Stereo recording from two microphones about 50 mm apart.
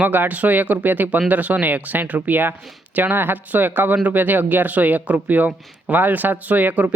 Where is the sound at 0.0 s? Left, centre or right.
Right.